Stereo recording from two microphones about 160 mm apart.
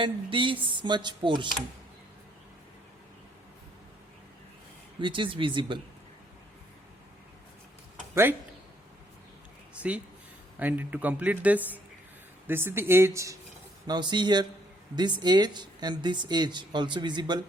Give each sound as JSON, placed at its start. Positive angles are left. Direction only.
{"t": 0.0, "sound": "speech", "side_deg": -30}
{"t": 4.9, "sound": "speech", "side_deg": -30}
{"t": 8.1, "sound": "speech", "side_deg": -15}
{"t": 10.6, "sound": "a man's voice", "side_deg": -10}